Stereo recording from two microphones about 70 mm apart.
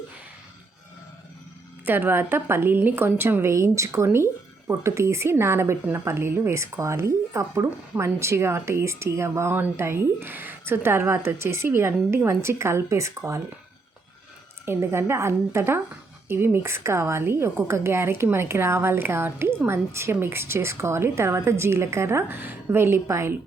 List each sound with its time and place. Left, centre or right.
1.8 s a woman's voice: right
3.5 s a woman's voice: right
14.6 s a woman's voice: right